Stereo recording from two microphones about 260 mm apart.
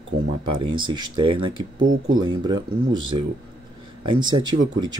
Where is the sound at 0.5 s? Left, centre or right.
Centre.